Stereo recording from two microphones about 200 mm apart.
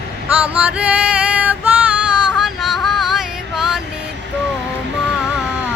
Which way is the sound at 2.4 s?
Centre (ahead or behind).